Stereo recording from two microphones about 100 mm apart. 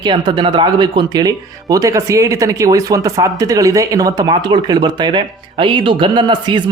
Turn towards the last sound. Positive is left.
turn(degrees=-50)  # may be behind; listen again after turning